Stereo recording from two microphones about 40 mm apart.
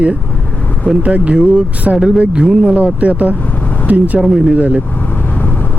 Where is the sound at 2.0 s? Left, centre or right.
Right.